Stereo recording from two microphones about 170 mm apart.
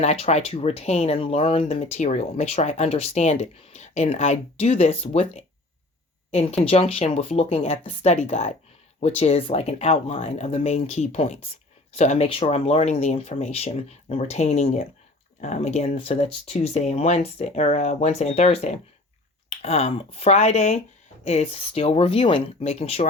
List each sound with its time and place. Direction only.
0.0 s speech: 40° left (ahead or behind)